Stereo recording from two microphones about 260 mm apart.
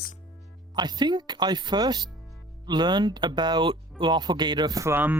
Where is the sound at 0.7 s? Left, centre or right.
Centre.